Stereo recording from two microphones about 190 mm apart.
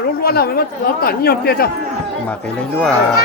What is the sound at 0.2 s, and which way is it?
Speech, 55° left (ahead or behind).